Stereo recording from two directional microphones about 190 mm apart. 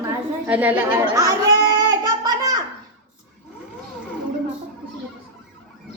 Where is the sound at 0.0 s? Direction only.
10° right (ahead or behind).